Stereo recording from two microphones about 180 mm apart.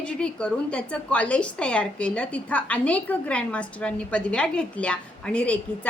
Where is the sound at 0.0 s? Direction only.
5° left (ahead or behind).